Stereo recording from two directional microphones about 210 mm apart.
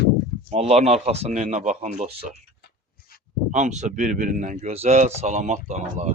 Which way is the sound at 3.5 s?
35° right (ahead or behind).